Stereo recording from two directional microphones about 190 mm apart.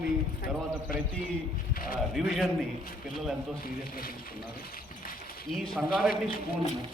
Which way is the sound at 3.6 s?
50° left (ahead or behind).